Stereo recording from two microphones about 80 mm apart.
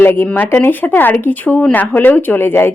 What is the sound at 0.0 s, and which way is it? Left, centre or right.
Speech, left.